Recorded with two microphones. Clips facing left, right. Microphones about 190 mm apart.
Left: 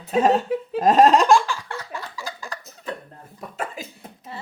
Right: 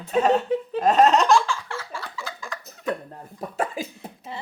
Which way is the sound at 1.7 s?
40° left (ahead or behind).